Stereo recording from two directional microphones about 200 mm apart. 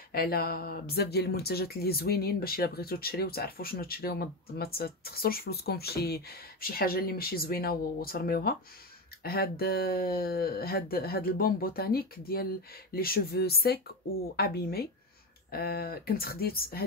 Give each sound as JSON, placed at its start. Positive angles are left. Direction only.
{"t": 0.1, "sound": "speech", "side_deg": 50}